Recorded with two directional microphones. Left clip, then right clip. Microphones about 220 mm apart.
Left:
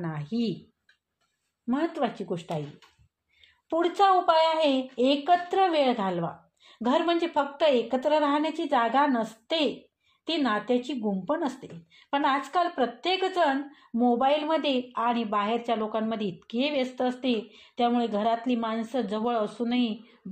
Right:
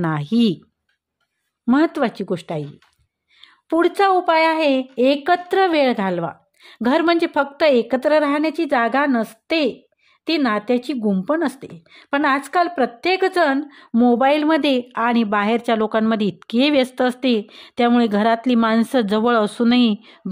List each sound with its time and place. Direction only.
0.0 s speech: 50° right (ahead or behind)
1.7 s speech: 50° right (ahead or behind)